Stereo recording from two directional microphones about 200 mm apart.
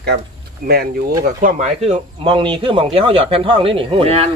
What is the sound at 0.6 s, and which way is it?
Speech, 50° right (ahead or behind).